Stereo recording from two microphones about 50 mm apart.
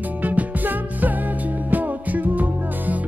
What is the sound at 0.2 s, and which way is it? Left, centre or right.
Music, right.